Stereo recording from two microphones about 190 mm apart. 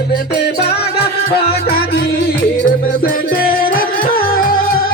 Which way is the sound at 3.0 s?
50° left (ahead or behind).